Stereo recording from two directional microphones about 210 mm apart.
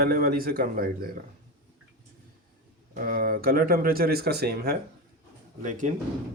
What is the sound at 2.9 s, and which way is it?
Speech, 40° right (ahead or behind).